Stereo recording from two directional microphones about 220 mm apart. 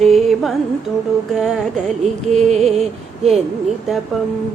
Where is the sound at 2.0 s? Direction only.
30° right (ahead or behind).